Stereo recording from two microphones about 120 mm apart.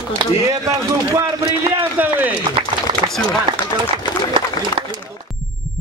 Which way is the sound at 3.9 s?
45° right (ahead or behind).